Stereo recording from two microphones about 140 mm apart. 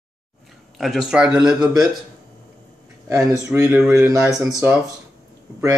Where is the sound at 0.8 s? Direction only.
Centre (ahead or behind).